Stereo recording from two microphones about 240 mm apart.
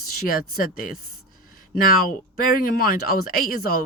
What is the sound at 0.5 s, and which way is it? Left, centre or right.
Speech, left.